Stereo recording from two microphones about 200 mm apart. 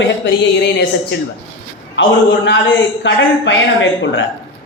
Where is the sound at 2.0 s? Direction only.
65° left (ahead or behind).